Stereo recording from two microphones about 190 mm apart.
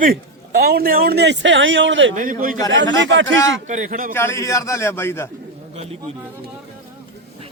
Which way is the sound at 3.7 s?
40° right (ahead or behind).